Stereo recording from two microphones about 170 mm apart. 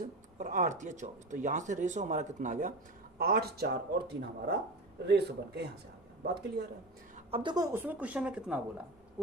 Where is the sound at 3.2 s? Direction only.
65° right (ahead or behind).